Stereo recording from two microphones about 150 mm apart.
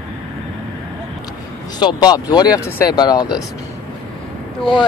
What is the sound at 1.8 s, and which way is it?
Speech, 30° left (ahead or behind).